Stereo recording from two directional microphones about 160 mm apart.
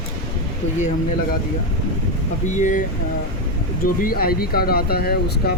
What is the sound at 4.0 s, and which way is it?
Speech, 70° left (ahead or behind).